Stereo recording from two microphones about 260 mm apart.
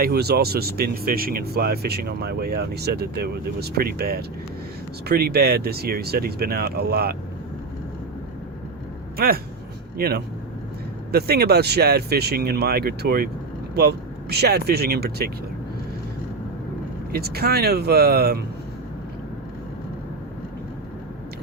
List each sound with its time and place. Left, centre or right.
0.0 s speech: right
9.1 s speech: right
17.1 s speech: right